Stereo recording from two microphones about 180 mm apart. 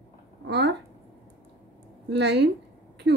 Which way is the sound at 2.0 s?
75° right (ahead or behind).